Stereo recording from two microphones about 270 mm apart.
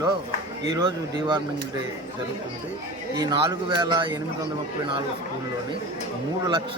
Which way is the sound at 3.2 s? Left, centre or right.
Centre.